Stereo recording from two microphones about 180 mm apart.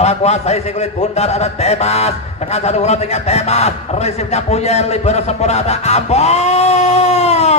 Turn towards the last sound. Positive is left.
turn(degrees=35)  # may be behind; listen again after turning